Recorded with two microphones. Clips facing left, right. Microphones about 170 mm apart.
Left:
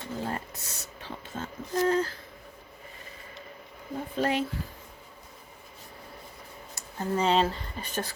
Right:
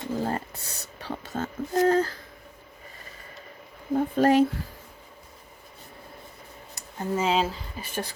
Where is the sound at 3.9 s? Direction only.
45° right (ahead or behind).